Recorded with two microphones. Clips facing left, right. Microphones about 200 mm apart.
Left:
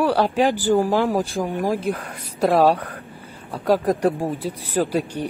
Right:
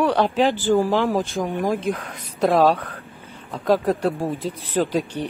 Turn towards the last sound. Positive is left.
turn(degrees=10)  # may be behind; listen again after turning